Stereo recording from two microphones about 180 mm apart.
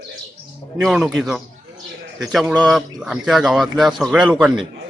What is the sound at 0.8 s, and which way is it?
Speech, centre (ahead or behind).